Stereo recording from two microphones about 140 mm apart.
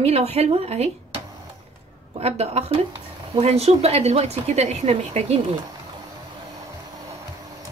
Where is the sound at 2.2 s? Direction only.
50° right (ahead or behind).